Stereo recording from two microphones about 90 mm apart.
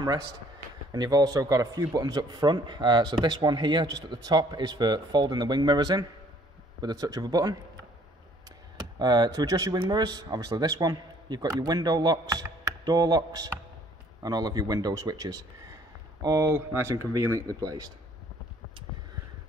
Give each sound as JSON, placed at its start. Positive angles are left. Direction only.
{"t": 0.9, "sound": "speech", "side_deg": -50}
{"t": 8.7, "sound": "speech", "side_deg": -50}
{"t": 16.5, "sound": "speech", "side_deg": -30}